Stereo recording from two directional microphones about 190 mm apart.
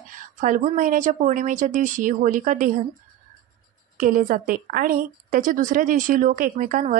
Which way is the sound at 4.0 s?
45° right (ahead or behind).